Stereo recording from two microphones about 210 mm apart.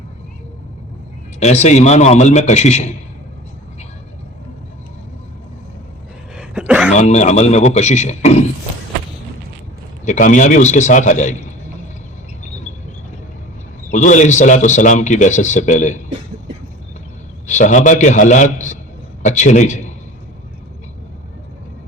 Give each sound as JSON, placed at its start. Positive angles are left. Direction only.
{"t": 1.4, "sound": "speech", "side_deg": 30}
{"t": 6.3, "sound": "a sound", "side_deg": -5}
{"t": 6.9, "sound": "speech", "side_deg": 35}
{"t": 10.1, "sound": "speech", "side_deg": 35}
{"t": 13.9, "sound": "speech", "side_deg": 35}
{"t": 17.4, "sound": "speech", "side_deg": 35}